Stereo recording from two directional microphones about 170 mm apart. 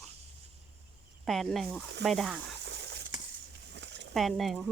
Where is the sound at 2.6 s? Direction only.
80° right.